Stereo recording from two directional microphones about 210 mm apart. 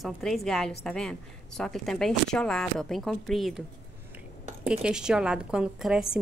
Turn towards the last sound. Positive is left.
turn(degrees=-5)  # may be behind; listen again after turning